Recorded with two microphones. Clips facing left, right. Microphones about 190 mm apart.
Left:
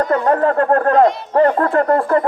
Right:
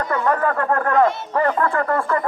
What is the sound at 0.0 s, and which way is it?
Speech, 30° left (ahead or behind).